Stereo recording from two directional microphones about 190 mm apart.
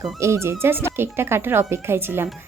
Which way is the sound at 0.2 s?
15° right (ahead or behind).